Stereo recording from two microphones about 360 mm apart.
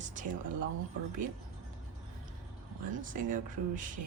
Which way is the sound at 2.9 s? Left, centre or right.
Right.